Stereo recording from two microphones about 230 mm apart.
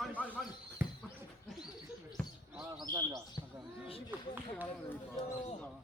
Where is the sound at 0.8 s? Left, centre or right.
Centre.